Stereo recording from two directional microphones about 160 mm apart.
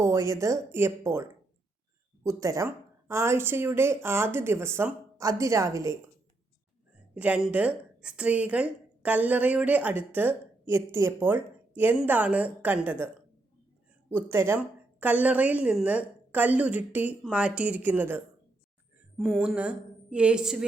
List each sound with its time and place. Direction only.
0.0 s a woman's voice: 15° right (ahead or behind)
7.1 s a woman's voice: 10° right (ahead or behind)
14.1 s a woman's voice: 15° right (ahead or behind)
19.1 s a woman's voice: centre (ahead or behind)